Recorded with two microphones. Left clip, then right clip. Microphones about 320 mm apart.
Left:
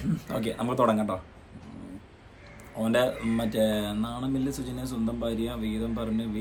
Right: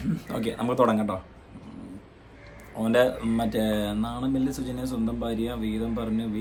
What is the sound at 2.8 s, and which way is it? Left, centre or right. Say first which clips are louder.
Speech: right 3 dB; centre.